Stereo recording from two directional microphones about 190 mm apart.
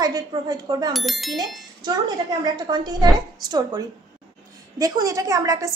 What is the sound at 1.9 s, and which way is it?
A woman's voice, 20° right (ahead or behind).